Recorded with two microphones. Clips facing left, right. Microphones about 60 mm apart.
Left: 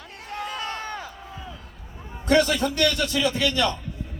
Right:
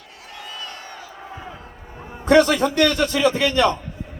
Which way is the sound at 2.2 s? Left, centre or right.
Right.